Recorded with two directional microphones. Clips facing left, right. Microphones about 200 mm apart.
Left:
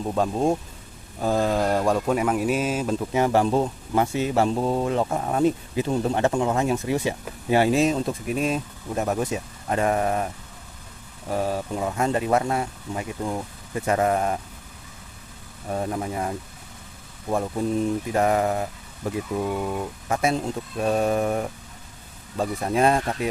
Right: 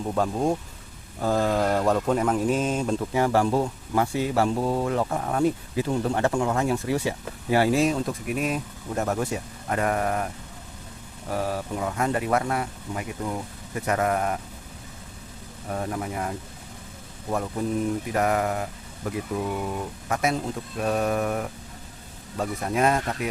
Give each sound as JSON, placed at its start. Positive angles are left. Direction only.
{"t": 0.1, "sound": "speech", "side_deg": 20}
{"t": 3.1, "sound": "speech", "side_deg": 20}
{"t": 11.3, "sound": "speech", "side_deg": 25}
{"t": 15.7, "sound": "speech", "side_deg": 25}
{"t": 18.1, "sound": "speech", "side_deg": 25}